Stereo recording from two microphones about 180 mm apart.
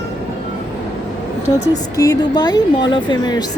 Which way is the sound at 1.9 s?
20° left (ahead or behind).